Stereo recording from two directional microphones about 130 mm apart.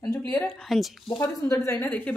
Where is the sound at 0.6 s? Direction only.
Centre (ahead or behind).